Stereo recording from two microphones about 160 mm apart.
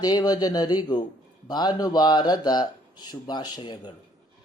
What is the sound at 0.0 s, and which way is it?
Speech, 25° left (ahead or behind).